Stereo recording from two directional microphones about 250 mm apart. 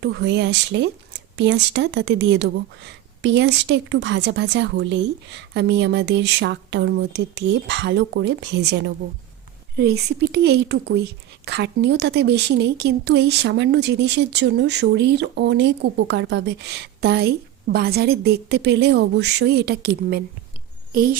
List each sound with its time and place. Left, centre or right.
0.0 s a woman's voice: right